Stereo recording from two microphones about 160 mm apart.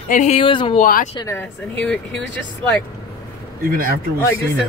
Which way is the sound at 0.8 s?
60° left (ahead or behind).